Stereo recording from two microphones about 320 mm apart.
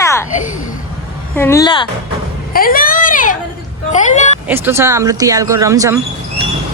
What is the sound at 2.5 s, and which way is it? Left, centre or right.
A child's voice, left.